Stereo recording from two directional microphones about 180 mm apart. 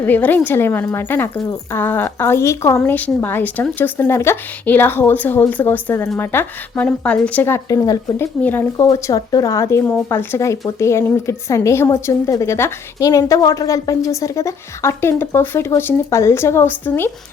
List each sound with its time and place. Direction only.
0.0 s a woman's voice: 10° left (ahead or behind)
8.9 s a woman's voice: 20° left (ahead or behind)